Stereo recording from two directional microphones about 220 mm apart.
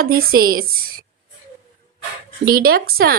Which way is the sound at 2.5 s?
40° right (ahead or behind).